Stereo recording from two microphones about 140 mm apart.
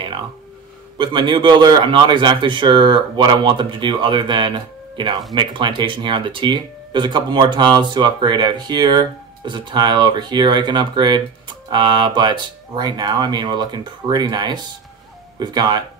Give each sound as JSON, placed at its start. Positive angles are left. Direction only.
{"t": 0.9, "sound": "speech", "side_deg": -35}